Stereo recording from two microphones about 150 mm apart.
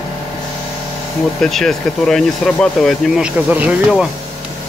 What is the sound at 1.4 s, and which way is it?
Speech, centre (ahead or behind).